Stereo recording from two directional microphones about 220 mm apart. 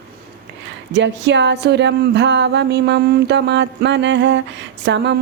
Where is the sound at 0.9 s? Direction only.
55° right (ahead or behind).